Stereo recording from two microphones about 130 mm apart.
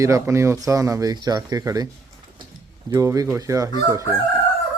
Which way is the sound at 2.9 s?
25° right (ahead or behind).